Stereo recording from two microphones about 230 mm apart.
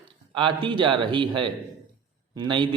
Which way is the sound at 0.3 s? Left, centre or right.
Right.